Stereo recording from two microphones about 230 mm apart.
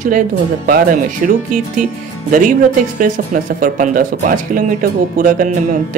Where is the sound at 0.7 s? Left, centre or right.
Right.